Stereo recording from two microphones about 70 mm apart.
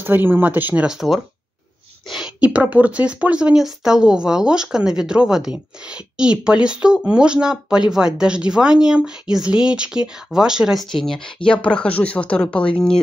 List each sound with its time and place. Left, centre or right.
0.0 s speech: right
0.8 s speech: centre
2.4 s speech: centre
10.8 s speech: centre